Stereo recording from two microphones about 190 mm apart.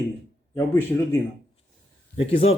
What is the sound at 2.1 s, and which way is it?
Speech, 30° left (ahead or behind).